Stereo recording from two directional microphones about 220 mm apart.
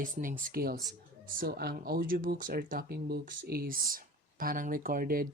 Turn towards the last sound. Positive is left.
turn(degrees=-40)  # may be behind; listen again after turning